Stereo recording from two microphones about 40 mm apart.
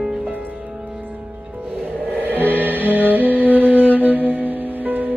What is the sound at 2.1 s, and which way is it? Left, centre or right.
Music, right.